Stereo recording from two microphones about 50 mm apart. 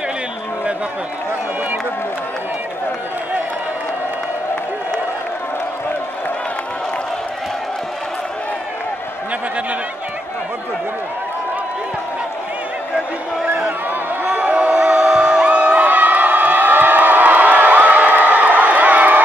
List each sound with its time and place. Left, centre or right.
14.3 s music: right